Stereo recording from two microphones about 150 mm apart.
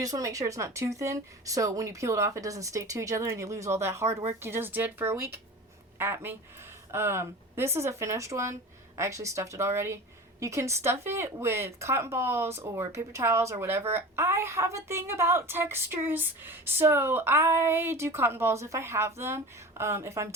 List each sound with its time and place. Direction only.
0.0 s speech: 20° right (ahead or behind)